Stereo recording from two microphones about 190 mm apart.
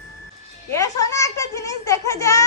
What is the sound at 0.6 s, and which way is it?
Baby laughter, 15° left (ahead or behind).